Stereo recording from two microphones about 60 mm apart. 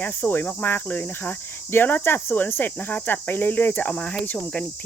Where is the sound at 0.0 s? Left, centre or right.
Left.